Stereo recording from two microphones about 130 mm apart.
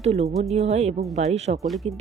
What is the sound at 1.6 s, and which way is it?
Speech, centre (ahead or behind).